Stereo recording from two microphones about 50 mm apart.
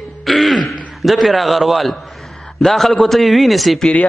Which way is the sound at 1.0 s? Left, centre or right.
Centre.